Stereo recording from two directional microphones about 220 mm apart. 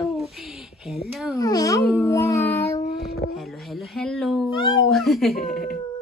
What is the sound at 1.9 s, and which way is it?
Child singing, 10° left (ahead or behind).